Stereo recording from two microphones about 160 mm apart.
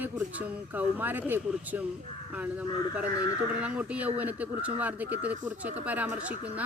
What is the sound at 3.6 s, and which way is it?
Speech, 10° right (ahead or behind).